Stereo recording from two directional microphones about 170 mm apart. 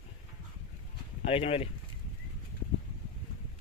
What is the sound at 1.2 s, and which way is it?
Speech, 35° left (ahead or behind).